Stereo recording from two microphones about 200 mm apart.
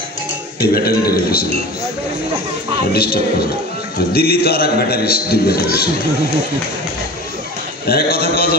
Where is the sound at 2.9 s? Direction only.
50° left (ahead or behind).